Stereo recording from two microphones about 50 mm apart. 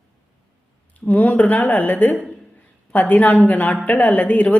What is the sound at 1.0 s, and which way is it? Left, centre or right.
Speech, left.